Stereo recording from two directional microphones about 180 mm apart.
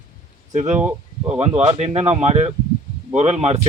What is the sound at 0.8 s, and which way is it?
Speech, 10° right (ahead or behind).